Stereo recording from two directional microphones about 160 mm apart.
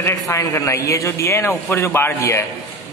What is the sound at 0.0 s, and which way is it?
A man's voice, 20° left (ahead or behind).